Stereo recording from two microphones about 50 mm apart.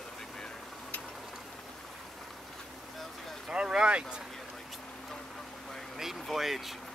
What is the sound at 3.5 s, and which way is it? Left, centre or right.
Vehicle, centre.